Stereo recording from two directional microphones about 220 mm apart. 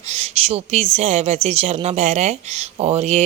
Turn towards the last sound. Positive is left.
turn(degrees=-30)  # may be behind; listen again after turning